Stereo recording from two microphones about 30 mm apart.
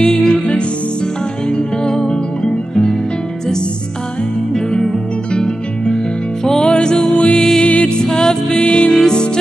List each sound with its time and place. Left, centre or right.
0.0 s music: left
4.6 s music: left
8.0 s music: left
8.6 s music: left
8.9 s music: left